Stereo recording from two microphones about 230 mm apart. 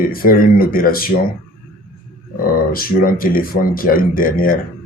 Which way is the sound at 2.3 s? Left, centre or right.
Left.